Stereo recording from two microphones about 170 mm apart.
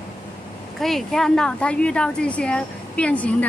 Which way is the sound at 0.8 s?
Centre (ahead or behind).